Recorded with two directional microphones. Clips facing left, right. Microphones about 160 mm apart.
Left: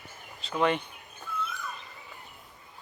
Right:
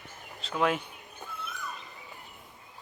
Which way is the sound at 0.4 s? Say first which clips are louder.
Left 1 dB; centre (ahead or behind).